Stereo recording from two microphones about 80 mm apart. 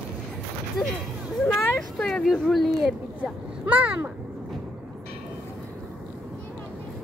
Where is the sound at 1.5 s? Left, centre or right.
Centre.